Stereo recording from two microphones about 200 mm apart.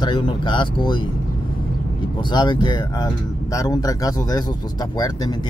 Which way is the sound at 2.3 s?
20° left (ahead or behind).